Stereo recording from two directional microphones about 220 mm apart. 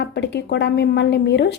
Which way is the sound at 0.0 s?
50° left (ahead or behind).